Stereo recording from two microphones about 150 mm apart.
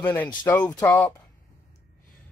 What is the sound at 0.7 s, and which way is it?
Speech, 10° left (ahead or behind).